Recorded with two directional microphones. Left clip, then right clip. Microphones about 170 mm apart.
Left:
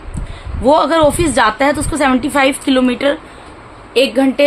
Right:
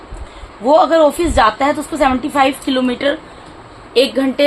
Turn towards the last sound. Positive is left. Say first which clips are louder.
# left 1 dB
turn(degrees=20)  # may be behind; listen again after turning